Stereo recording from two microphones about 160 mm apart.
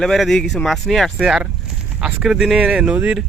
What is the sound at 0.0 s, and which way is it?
Speech, centre (ahead or behind).